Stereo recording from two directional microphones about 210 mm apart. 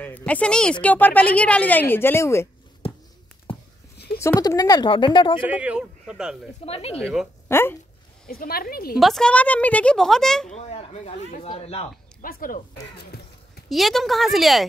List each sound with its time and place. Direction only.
0.0 s speech: 5° left (ahead or behind)
3.5 s a sound: 25° left (ahead or behind)
4.2 s speech: 15° left (ahead or behind)
5.5 s a woman's voice: 5° right (ahead or behind)
6.6 s speech: 30° left (ahead or behind)
7.4 s speech: 10° left (ahead or behind)
8.3 s speech: 45° left (ahead or behind)
9.0 s a woman's voice: 5° left (ahead or behind)
10.5 s speech: 30° left (ahead or behind)
12.2 s speech: 40° left (ahead or behind)
13.7 s a woman's voice: centre (ahead or behind)